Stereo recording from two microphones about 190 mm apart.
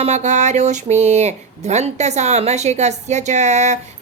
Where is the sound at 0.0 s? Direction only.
35° right (ahead or behind).